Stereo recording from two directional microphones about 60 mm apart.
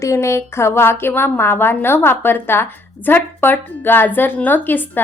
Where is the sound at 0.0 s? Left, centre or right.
Left.